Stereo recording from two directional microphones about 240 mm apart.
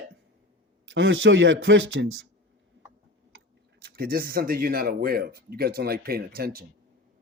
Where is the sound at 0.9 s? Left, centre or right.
Right.